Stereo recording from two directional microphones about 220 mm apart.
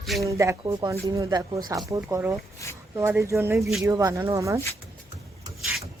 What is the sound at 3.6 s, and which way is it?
Speech, centre (ahead or behind).